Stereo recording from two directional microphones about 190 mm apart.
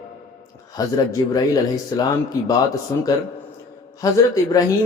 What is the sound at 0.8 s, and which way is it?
A man's voice, 20° left (ahead or behind).